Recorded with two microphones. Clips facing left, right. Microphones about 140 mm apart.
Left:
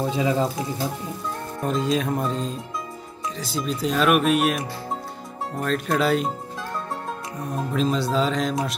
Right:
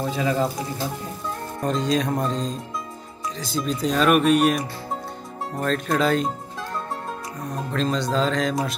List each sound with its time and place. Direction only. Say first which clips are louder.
0.1 s speech: right 1 dB; 20° left (ahead or behind)
1.6 s speech: right 1 dB; 5° left (ahead or behind)
7.7 s speech: left 1 dB; 5° left (ahead or behind)